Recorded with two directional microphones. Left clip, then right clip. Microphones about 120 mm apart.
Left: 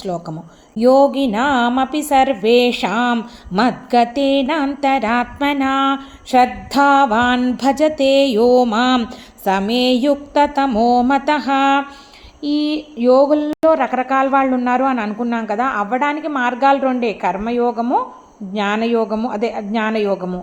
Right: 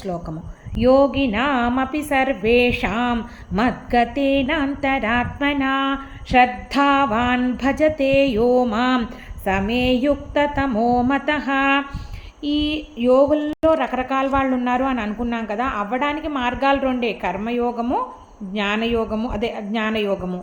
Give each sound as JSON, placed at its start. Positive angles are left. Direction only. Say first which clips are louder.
{"t": 0.0, "sound": "a woman's voice", "louder": "left 4 dB", "side_deg": 30}